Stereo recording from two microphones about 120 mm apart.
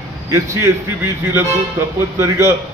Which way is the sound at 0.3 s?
25° right (ahead or behind).